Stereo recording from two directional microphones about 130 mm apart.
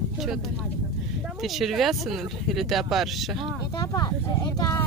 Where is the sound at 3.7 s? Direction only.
30° left (ahead or behind).